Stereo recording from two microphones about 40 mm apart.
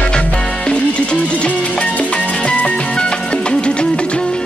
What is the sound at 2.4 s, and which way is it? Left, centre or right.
Music, left.